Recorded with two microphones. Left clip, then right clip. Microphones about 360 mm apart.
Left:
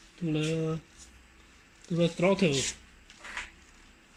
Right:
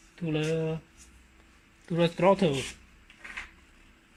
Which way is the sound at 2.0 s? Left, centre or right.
Centre.